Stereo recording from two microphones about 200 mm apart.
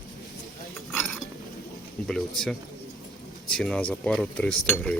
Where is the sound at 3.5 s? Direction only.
5° left (ahead or behind).